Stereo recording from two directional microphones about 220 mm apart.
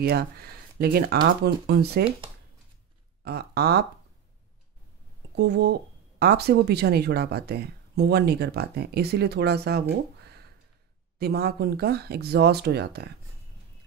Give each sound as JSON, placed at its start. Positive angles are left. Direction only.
{"t": 0.0, "sound": "speech", "side_deg": -45}
{"t": 3.3, "sound": "speech", "side_deg": -45}
{"t": 5.3, "sound": "speech", "side_deg": -50}